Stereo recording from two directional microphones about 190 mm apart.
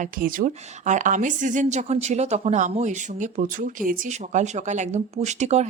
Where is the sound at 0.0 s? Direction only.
45° right (ahead or behind).